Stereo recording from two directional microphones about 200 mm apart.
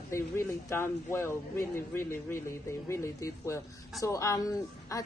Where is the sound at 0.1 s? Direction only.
15° left (ahead or behind).